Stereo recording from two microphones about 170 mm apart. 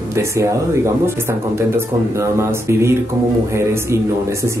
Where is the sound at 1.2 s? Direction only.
15° right (ahead or behind).